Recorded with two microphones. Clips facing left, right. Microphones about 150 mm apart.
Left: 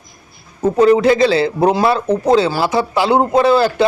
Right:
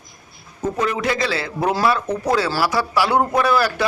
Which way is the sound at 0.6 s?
30° left (ahead or behind).